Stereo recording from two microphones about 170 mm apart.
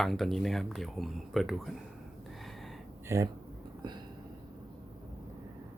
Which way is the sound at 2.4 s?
Centre (ahead or behind).